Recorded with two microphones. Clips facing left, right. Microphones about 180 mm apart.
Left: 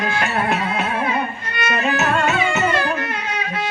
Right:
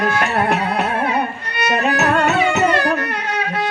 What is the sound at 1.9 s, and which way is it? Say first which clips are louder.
Music: right 2 dB; 40° right (ahead or behind).